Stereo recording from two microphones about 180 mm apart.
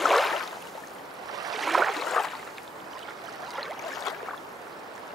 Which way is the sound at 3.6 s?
Centre (ahead or behind).